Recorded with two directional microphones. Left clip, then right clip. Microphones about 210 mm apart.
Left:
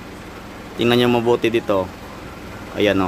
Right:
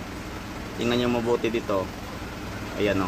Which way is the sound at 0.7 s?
50° left (ahead or behind).